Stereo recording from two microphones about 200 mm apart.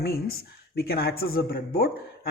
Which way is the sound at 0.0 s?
50° left (ahead or behind).